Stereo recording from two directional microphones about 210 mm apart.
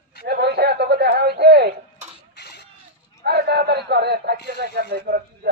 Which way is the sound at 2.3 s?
50° left (ahead or behind).